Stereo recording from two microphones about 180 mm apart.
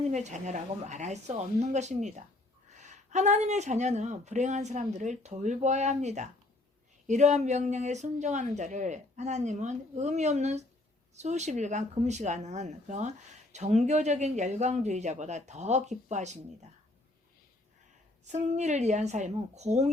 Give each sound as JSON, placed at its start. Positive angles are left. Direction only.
{"t": 0.1, "sound": "speech", "side_deg": -40}
{"t": 18.3, "sound": "speech", "side_deg": -40}